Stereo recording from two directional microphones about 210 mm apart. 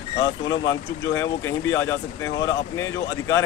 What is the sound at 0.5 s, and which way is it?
Speech, 60° left (ahead or behind).